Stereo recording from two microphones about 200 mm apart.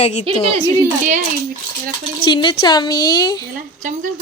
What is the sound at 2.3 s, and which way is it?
A woman's voice, 25° left (ahead or behind).